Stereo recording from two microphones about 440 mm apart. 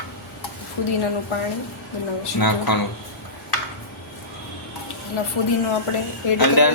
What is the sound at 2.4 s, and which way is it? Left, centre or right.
Speech, left.